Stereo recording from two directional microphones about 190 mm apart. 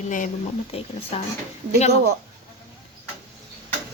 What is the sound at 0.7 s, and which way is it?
Speech, 30° left (ahead or behind).